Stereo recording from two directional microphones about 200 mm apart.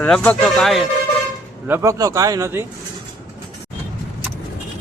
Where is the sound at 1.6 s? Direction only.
15° right (ahead or behind).